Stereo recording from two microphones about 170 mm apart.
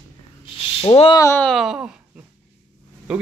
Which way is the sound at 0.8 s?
30° left (ahead or behind).